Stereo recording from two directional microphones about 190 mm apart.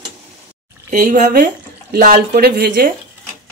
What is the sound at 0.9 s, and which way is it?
Speech, 50° right (ahead or behind).